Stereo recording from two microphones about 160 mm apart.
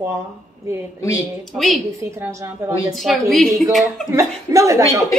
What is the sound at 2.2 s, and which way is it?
Speech, 15° right (ahead or behind).